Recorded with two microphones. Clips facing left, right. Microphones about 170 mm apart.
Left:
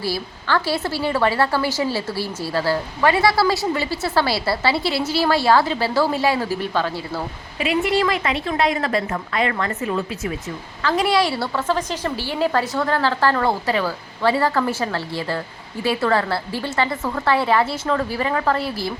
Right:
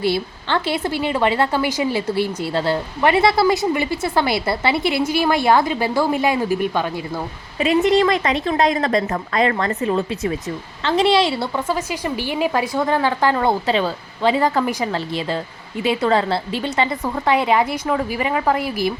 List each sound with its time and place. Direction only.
0.0 s a woman's voice: 25° right (ahead or behind)
7.6 s a woman's voice: 35° right (ahead or behind)
11.7 s a woman's voice: 10° right (ahead or behind)